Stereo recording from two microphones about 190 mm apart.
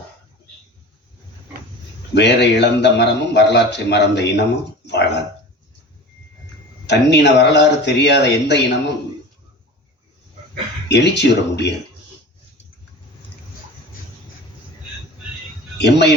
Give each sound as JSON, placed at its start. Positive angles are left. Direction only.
{"t": 2.1, "sound": "a man's voice", "side_deg": 65}
{"t": 6.8, "sound": "a man's voice", "side_deg": 65}
{"t": 10.8, "sound": "a man's voice", "side_deg": 65}
{"t": 15.8, "sound": "a man's voice", "side_deg": 65}